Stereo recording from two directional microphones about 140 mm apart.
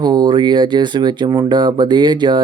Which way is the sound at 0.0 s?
30° right (ahead or behind).